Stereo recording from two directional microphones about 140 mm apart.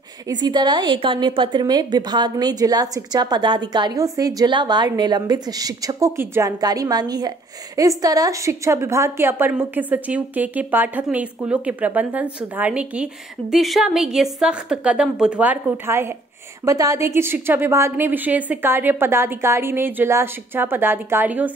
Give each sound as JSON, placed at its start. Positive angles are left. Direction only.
{"t": 0.3, "sound": "a woman's voice", "side_deg": -30}